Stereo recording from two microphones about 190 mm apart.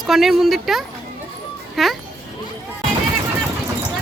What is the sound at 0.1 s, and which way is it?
Speech, centre (ahead or behind).